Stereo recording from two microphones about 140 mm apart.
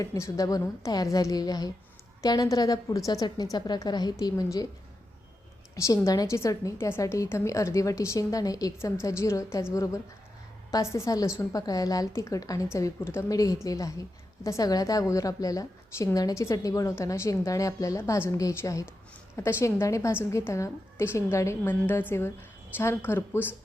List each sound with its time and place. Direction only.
0.0 s a woman's voice: 25° left (ahead or behind)
5.7 s a woman's voice: 25° left (ahead or behind)